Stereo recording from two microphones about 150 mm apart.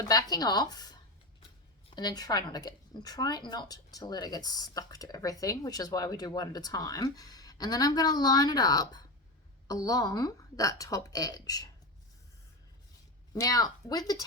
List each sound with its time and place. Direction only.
0.0 s a woman's voice: 25° left (ahead or behind)
13.3 s a woman's voice: 25° left (ahead or behind)